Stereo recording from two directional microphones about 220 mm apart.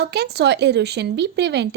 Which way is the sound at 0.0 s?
50° right (ahead or behind).